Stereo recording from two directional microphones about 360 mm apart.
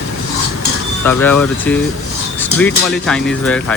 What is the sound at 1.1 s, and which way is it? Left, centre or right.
Speech, centre.